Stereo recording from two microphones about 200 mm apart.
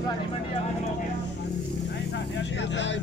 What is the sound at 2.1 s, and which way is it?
Vehicle, 65° left (ahead or behind).